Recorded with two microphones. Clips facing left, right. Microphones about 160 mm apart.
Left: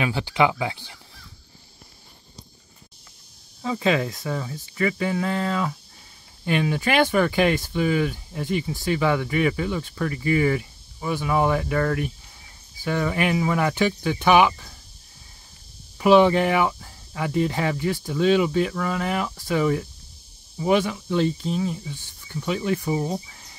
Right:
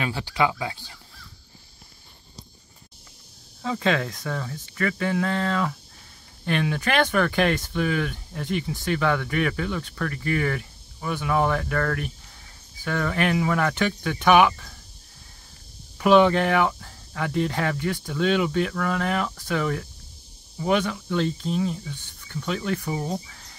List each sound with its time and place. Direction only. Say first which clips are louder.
0.0 s speech: left 3 dB; 15° left (ahead or behind)
3.6 s speech: left 2 dB; 5° left (ahead or behind)
16.0 s speech: left 1 dB; 5° left (ahead or behind)
23.2 s a sound: even; 15° left (ahead or behind)